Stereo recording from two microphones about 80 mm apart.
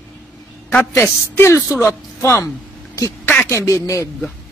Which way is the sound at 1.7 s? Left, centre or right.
Left.